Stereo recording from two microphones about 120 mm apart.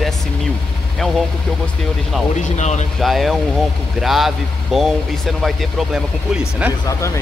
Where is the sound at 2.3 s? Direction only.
75° left (ahead or behind).